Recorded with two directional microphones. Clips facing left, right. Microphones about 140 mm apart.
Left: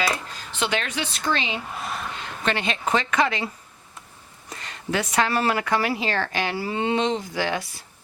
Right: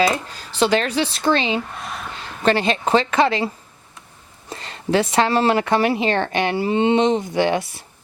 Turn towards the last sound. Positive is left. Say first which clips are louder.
# right 7 dB
turn(degrees=-25)  # may be behind; listen again after turning